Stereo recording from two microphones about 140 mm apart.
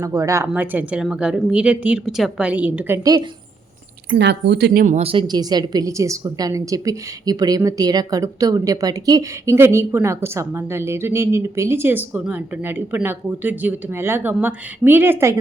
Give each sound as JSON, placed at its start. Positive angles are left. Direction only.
{"t": 0.0, "sound": "a woman's voice", "side_deg": -20}
{"t": 0.4, "sound": "a woman's voice", "side_deg": -10}
{"t": 3.0, "sound": "a woman's voice", "side_deg": -25}
{"t": 4.7, "sound": "speech", "side_deg": -90}
{"t": 4.9, "sound": "a woman's voice", "side_deg": -40}